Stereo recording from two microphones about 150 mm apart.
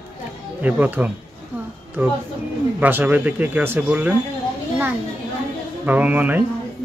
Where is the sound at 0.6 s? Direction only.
10° right (ahead or behind).